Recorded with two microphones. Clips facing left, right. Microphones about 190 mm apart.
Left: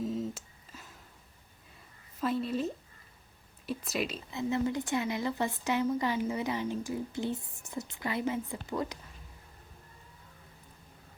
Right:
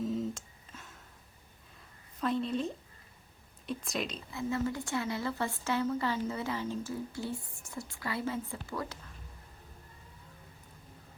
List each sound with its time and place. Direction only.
0.0 s a sound: centre (ahead or behind)
2.2 s a woman's voice: 5° left (ahead or behind)
4.3 s speech: 20° left (ahead or behind)